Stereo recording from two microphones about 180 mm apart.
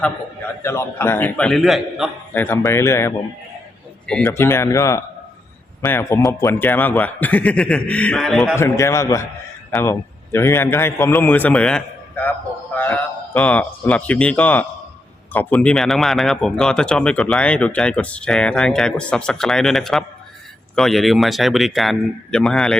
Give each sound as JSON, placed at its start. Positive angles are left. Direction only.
{"t": 0.6, "sound": "a man's voice", "side_deg": 15}
{"t": 2.4, "sound": "a man's voice", "side_deg": 10}
{"t": 8.5, "sound": "a man's voice", "side_deg": 15}